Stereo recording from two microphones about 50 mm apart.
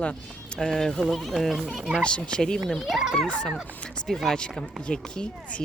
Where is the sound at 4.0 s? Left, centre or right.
Centre.